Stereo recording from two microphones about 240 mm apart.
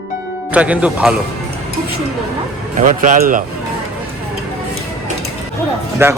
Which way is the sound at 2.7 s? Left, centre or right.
Right.